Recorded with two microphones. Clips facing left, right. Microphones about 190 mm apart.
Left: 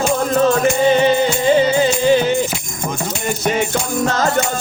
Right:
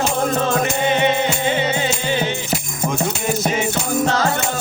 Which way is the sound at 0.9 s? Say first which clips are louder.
Left 4 dB; 35° left (ahead or behind).